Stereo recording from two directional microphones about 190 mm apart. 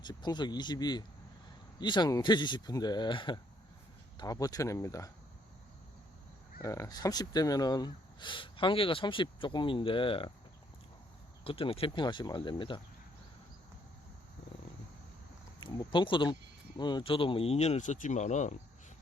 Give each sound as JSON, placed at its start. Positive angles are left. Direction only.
{"t": 0.0, "sound": "speech", "side_deg": 20}
{"t": 6.6, "sound": "speech", "side_deg": 15}
{"t": 11.4, "sound": "speech", "side_deg": 30}
{"t": 15.6, "sound": "speech", "side_deg": 25}